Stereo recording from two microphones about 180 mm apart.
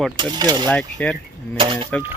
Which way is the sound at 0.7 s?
5° left (ahead or behind).